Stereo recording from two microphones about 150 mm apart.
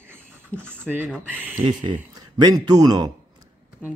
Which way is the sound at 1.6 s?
30° right (ahead or behind).